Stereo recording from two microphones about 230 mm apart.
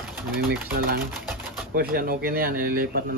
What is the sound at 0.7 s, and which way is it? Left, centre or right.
Speech, right.